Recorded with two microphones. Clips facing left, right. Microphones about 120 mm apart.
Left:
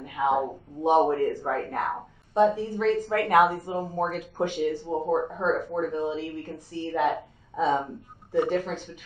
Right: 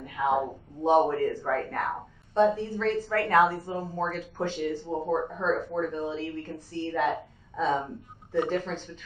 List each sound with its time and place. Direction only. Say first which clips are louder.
0.0 s a sound: left 2 dB; 15° left (ahead or behind)
0.4 s a woman's voice: left 2 dB; 15° left (ahead or behind)
8.4 s a woman's voice: left 3 dB; 10° left (ahead or behind)